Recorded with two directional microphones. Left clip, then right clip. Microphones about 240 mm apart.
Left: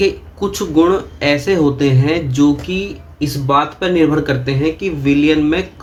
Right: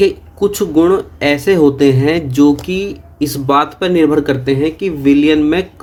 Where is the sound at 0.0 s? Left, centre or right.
Right.